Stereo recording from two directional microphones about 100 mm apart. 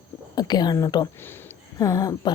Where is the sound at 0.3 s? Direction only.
45° left (ahead or behind).